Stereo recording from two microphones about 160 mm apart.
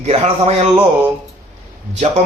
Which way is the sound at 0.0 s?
40° right (ahead or behind).